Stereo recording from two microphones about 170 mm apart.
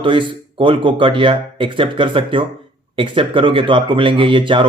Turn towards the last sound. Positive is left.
turn(degrees=-30)  # may be behind; listen again after turning